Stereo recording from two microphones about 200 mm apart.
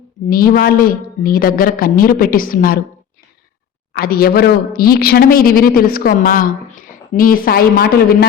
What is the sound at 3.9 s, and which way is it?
A woman's voice, 50° left (ahead or behind).